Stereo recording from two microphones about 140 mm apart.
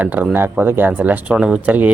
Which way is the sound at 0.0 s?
10° right (ahead or behind).